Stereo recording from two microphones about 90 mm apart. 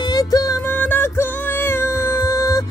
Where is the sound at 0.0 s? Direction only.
45° left (ahead or behind).